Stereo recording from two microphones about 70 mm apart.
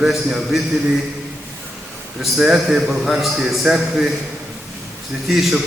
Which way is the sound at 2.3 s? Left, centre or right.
Centre.